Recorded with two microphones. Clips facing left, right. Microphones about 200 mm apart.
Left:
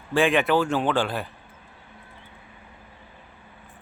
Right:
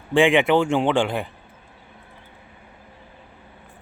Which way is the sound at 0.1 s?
15° right (ahead or behind).